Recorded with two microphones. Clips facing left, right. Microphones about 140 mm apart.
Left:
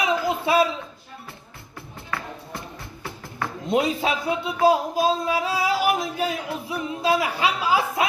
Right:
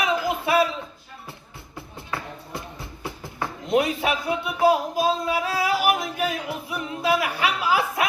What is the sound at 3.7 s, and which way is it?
Speech, 25° left (ahead or behind).